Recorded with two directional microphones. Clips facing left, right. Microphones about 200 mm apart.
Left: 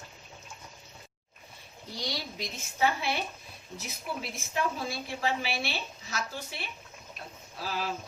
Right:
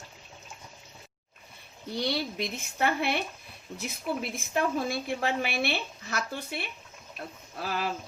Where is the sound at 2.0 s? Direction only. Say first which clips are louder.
Right 7 dB; 60° right (ahead or behind).